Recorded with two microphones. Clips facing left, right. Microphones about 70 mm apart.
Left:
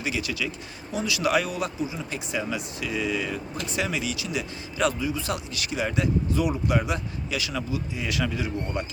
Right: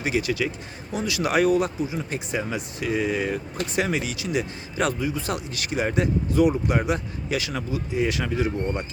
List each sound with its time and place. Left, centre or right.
0.0 s speech: right